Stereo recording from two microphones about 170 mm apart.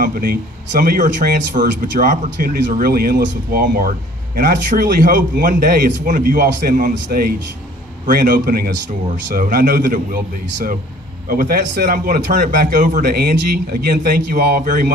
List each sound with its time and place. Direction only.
0.0 s a man's voice: 55° right (ahead or behind)